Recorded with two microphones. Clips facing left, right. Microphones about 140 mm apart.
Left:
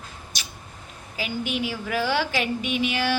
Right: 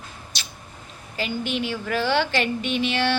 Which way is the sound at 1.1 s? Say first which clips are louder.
Right 1 dB; 5° left (ahead or behind).